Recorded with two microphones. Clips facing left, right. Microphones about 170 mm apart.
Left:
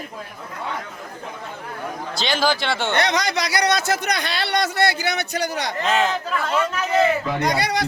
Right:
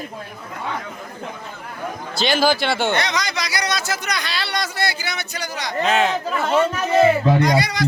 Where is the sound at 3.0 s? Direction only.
60° left (ahead or behind).